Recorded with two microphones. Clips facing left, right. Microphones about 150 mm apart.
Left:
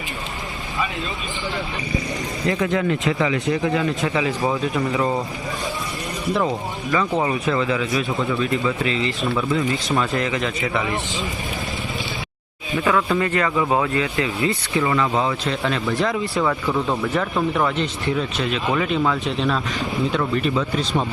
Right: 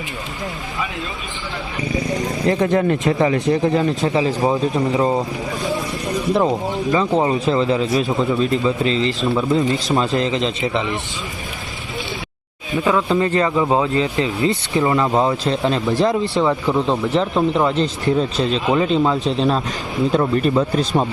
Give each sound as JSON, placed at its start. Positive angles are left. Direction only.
{"t": 2.6, "sound": "a man's voice", "side_deg": -40}
{"t": 6.3, "sound": "speech", "side_deg": -25}
{"t": 12.7, "sound": "a man's voice", "side_deg": -20}